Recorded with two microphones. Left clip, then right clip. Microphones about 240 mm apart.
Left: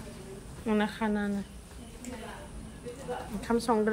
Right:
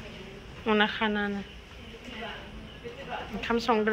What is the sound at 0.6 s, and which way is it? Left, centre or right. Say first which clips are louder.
Speech: right 5 dB; centre.